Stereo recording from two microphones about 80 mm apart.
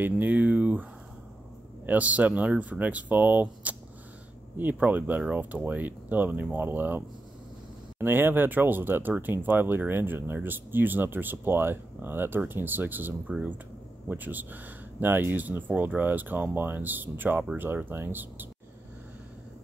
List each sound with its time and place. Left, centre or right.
0.0 s speech: right
1.9 s speech: centre